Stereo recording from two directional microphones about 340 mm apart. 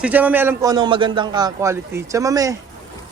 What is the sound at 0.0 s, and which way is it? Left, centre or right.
A man's voice, centre.